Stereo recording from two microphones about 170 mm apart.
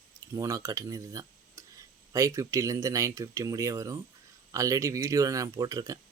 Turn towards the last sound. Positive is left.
turn(degrees=-20)  # may be behind; listen again after turning